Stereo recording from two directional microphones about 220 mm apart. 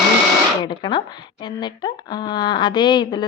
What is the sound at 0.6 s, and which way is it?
A woman's voice, 20° left (ahead or behind).